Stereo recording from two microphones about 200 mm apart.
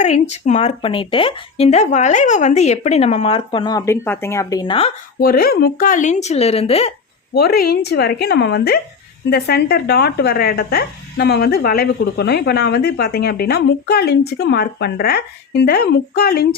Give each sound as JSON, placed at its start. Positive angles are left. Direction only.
{"t": 0.0, "sound": "speech", "side_deg": 35}
{"t": 5.2, "sound": "speech", "side_deg": 50}
{"t": 7.3, "sound": "speech", "side_deg": 50}